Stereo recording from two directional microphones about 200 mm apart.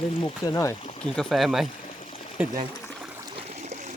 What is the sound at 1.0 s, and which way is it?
Speech, centre (ahead or behind).